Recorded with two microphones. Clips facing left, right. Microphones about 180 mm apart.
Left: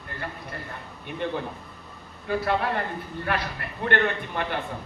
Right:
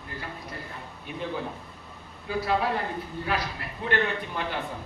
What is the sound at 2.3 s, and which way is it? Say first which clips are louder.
A man's voice: left 1 dB; 60° left (ahead or behind).